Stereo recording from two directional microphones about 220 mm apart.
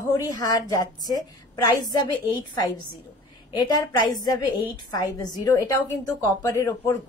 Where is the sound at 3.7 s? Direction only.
20° left (ahead or behind).